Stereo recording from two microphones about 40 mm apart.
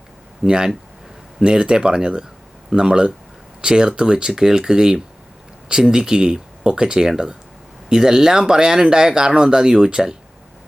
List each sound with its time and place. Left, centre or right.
0.4 s speech: centre